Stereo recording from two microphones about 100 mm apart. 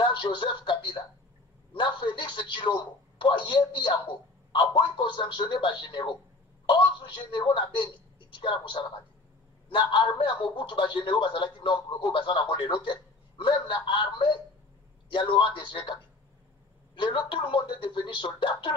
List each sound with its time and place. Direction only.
0.0 s speech: 55° left (ahead or behind)